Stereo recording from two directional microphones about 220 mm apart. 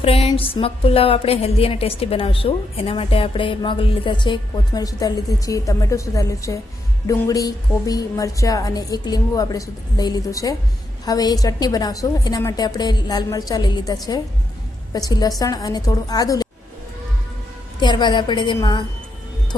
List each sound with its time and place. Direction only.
0.0 s a woman's voice: 25° left (ahead or behind)
17.7 s a woman's voice: 20° left (ahead or behind)